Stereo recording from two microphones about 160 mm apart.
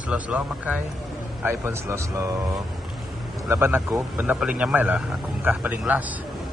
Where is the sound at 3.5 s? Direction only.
15° right (ahead or behind).